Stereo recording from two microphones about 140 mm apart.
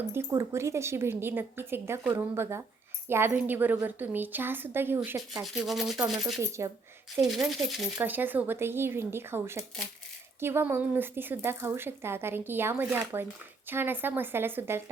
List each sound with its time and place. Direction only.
0.1 s speech: 20° right (ahead or behind)
5.6 s speech: centre (ahead or behind)
6.4 s speech: 20° right (ahead or behind)
7.3 s speech: centre (ahead or behind)
8.0 s speech: 15° right (ahead or behind)